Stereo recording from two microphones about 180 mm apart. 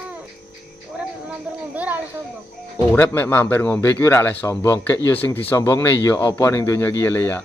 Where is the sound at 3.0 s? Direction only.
10° left (ahead or behind).